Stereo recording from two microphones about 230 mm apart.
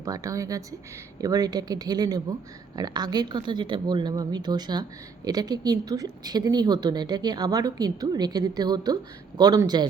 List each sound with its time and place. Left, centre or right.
0.0 s speech: centre